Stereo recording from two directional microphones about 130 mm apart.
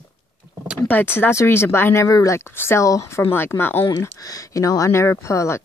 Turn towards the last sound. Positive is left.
turn(degrees=20)  # may be behind; listen again after turning